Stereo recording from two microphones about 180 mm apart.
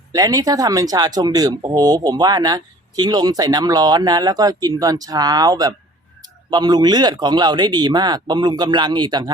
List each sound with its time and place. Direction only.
0.1 s speech: 20° right (ahead or behind)